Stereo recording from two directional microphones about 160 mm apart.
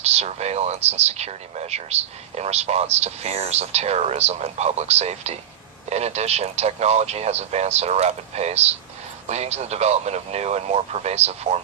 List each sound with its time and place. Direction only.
0.0 s speech: 40° right (ahead or behind)